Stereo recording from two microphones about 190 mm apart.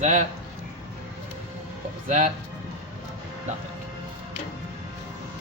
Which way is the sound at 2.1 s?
35° right (ahead or behind).